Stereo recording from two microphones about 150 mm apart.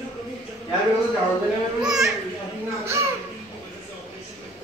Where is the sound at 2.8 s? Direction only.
20° right (ahead or behind).